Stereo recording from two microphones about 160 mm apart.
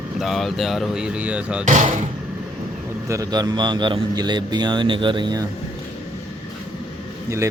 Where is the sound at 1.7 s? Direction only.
50° right (ahead or behind).